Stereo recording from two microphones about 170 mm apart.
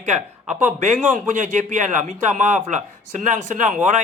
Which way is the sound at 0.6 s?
45° right (ahead or behind).